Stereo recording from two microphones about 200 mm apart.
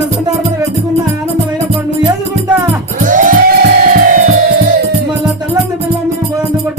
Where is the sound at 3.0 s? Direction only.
40° right (ahead or behind).